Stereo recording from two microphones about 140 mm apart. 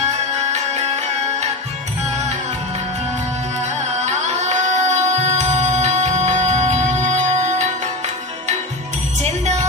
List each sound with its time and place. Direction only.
0.5 s music: 50° right (ahead or behind)
3.6 s music: 55° right (ahead or behind)